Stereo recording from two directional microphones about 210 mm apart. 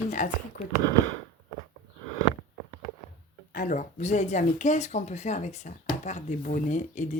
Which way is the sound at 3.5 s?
40° left (ahead or behind).